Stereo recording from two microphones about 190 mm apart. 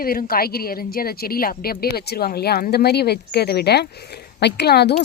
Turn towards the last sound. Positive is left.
turn(degrees=60)  # may be behind; listen again after turning